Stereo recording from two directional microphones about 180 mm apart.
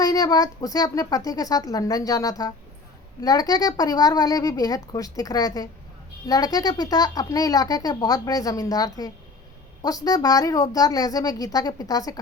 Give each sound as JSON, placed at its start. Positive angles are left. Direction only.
{"t": 0.0, "sound": "speech", "side_deg": 20}